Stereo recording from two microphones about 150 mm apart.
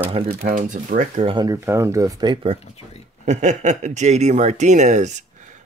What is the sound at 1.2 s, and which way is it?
Speech, 25° right (ahead or behind).